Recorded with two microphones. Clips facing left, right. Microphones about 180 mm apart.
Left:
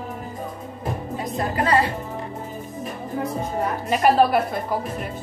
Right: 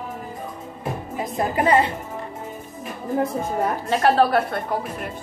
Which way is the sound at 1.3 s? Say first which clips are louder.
Right 2 dB; 20° right (ahead or behind).